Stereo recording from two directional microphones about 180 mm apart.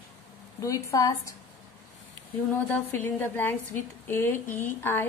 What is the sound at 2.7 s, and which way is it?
Speech, 10° left (ahead or behind).